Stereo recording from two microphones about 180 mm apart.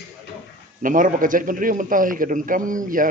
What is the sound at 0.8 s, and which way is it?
A man's voice, 50° right (ahead or behind).